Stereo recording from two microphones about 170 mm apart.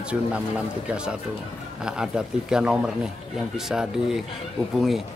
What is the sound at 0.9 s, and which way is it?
Speech, 5° right (ahead or behind).